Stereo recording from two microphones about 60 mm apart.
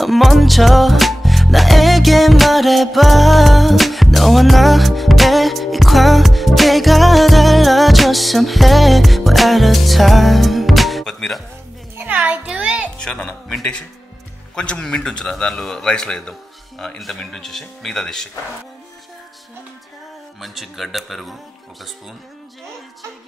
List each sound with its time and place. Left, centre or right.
0.0 s music: centre
11.1 s speech: centre
12.0 s a child's voice: right
13.0 s a man's voice: centre
14.5 s a man's voice: centre
20.3 s speech: centre